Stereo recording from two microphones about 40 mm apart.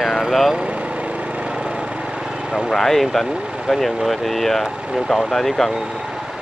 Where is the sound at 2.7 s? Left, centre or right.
Centre.